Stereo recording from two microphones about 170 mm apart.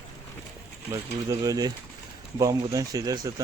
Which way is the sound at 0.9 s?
20° right (ahead or behind).